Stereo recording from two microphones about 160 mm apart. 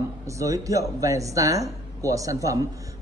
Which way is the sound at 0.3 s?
20° right (ahead or behind).